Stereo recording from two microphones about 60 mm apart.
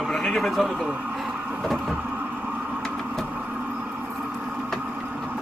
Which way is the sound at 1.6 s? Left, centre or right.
Centre.